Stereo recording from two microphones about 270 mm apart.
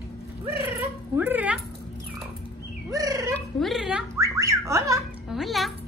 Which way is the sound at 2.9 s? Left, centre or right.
Centre.